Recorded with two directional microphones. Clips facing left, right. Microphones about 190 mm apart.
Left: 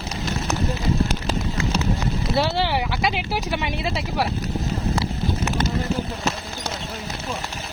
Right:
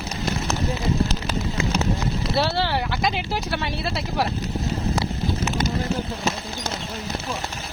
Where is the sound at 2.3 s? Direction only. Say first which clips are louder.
Left 1 dB; 15° left (ahead or behind).